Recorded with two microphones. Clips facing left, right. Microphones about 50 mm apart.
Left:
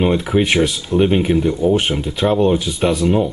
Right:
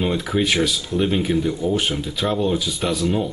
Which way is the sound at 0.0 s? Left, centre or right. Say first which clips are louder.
Left 5 dB; left.